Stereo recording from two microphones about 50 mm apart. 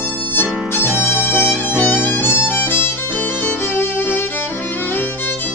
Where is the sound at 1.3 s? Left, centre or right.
Left.